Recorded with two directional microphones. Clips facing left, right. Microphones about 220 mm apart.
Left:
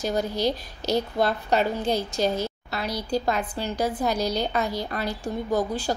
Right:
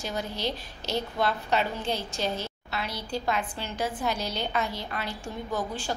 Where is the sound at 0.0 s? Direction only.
40° left (ahead or behind).